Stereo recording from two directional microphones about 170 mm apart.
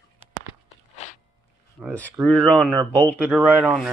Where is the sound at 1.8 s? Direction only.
10° left (ahead or behind).